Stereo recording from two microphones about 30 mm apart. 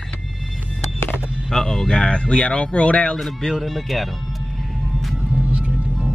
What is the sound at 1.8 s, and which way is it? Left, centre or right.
Speech, left.